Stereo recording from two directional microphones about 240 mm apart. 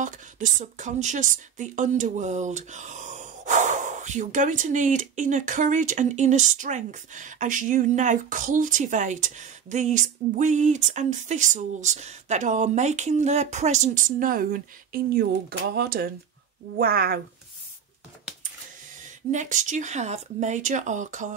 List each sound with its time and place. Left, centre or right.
0.0 s a woman's voice: right
19.3 s a woman's voice: right